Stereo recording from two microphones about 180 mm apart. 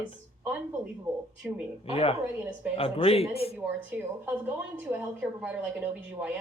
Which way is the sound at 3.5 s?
10° right (ahead or behind).